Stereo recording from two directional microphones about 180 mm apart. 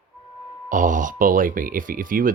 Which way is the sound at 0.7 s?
45° right (ahead or behind).